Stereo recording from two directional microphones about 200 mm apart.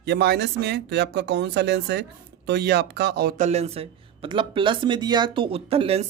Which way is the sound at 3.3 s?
35° right (ahead or behind).